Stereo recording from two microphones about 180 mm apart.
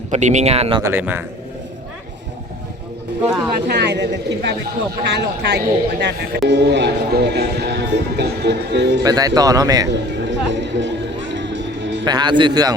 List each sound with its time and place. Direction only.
0.1 s speech: 40° right (ahead or behind)
0.8 s speech: 10° right (ahead or behind)
3.2 s speech: 5° right (ahead or behind)
3.7 s speech: 70° right (ahead or behind)
9.0 s a man's voice: 20° right (ahead or behind)
9.9 s music: 80° right
12.0 s a man's voice: 25° right (ahead or behind)